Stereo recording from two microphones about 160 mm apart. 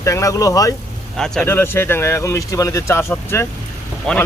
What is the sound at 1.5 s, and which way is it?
Speech, 15° left (ahead or behind).